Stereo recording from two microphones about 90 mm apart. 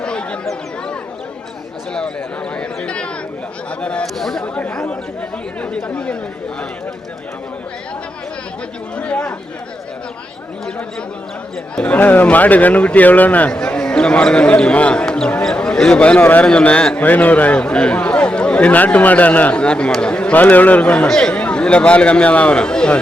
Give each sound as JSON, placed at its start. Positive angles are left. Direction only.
{"t": 0.0, "sound": "chatter", "side_deg": 10}
{"t": 2.6, "sound": "chatter", "side_deg": 10}
{"t": 3.7, "sound": "speech", "side_deg": 10}
{"t": 4.5, "sound": "speech", "side_deg": 15}
{"t": 9.0, "sound": "speech", "side_deg": 10}
{"t": 11.8, "sound": "speech", "side_deg": 15}